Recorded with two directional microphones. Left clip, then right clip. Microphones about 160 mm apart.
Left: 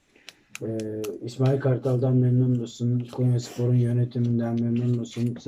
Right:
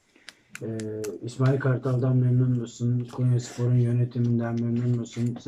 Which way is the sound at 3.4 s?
10° left (ahead or behind).